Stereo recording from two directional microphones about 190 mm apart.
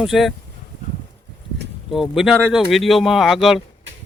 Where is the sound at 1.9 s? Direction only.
Centre (ahead or behind).